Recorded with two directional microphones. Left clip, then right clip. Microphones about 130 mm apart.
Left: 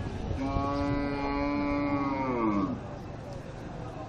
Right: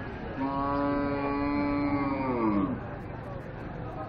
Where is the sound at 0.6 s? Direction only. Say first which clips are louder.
Right 3 dB; 10° left (ahead or behind); by 2.6 s 15° right (ahead or behind).